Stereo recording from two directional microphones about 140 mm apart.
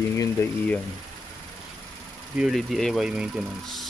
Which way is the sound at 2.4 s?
Centre (ahead or behind).